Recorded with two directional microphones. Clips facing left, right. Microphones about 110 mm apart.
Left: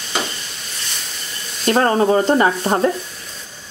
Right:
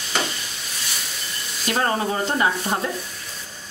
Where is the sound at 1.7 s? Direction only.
40° left (ahead or behind).